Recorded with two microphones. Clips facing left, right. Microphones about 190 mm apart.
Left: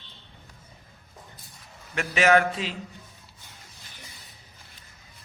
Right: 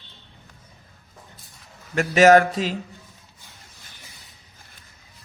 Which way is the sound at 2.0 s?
40° right (ahead or behind).